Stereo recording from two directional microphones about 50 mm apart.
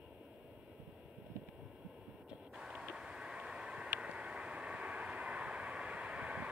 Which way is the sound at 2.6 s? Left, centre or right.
Centre.